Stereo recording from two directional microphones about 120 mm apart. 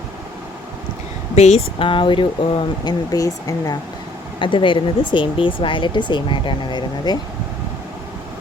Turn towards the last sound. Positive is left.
turn(degrees=35)  # may be behind; listen again after turning